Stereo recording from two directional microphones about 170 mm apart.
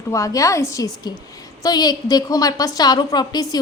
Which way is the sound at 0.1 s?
20° left (ahead or behind).